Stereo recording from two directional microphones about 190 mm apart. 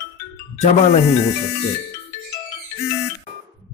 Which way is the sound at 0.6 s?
35° left (ahead or behind).